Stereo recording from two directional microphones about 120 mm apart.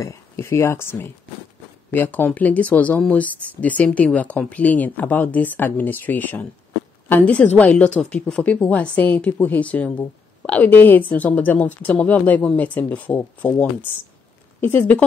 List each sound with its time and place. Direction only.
0.0 s speech: 25° left (ahead or behind)